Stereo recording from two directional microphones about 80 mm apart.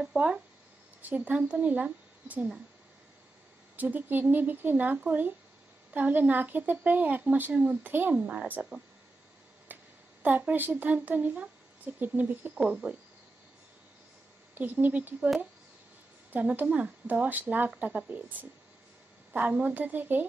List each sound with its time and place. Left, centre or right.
0.0 s a woman's voice: centre
3.7 s speech: right
9.7 s a sound: right
10.2 s speech: right
14.5 s speech: right
16.3 s speech: right